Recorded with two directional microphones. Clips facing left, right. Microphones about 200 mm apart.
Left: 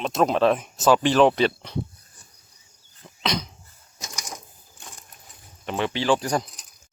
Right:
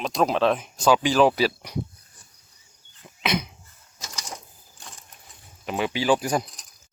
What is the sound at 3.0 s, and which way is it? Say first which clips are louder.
Dog: left 1 dB; 5° right (ahead or behind).